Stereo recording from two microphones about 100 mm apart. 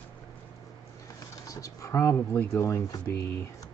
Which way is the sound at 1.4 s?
35° left (ahead or behind).